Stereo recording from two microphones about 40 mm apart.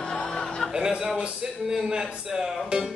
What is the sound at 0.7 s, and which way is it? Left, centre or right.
Mantra, centre.